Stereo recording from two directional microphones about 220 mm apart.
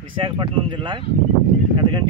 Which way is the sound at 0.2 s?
20° right (ahead or behind).